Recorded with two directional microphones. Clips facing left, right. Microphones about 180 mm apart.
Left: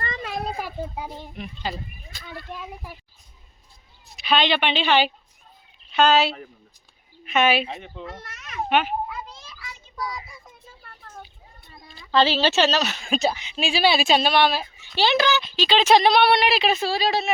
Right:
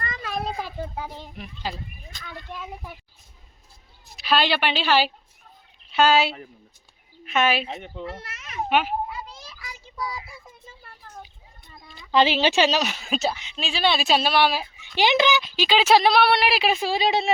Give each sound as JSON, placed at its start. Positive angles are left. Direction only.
{"t": 0.0, "sound": "a sound", "side_deg": 25}
{"t": 0.4, "sound": "a child's voice", "side_deg": 10}
{"t": 1.4, "sound": "speech", "side_deg": 0}
{"t": 4.2, "sound": "a woman's voice", "side_deg": -5}
{"t": 10.0, "sound": "a sound", "side_deg": -5}
{"t": 11.9, "sound": "a woman's voice", "side_deg": -15}